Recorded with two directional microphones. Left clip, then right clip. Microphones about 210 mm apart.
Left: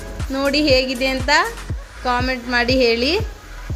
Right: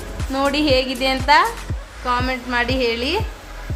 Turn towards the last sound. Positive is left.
turn(degrees=20)  # may be behind; listen again after turning